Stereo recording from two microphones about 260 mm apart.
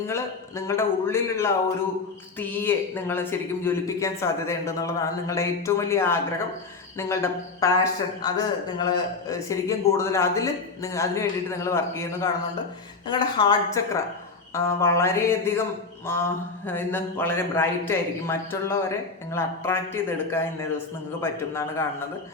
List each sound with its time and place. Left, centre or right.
0.1 s speech: centre